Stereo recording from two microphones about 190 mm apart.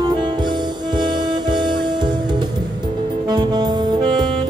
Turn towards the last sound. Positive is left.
turn(degrees=-20)  # may be behind; listen again after turning